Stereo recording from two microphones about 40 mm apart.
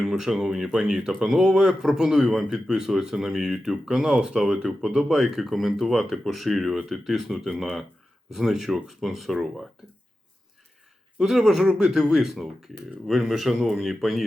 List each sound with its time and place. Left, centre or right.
0.0 s speech: centre
4.4 s speech: centre
6.7 s speech: centre
11.2 s speech: centre
11.6 s speech: centre